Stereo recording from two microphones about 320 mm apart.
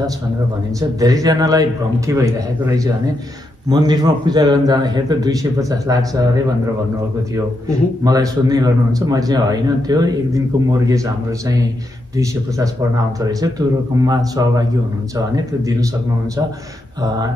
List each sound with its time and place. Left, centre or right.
0.7 s a man's voice: centre
8.0 s a man's voice: centre
12.2 s a man's voice: centre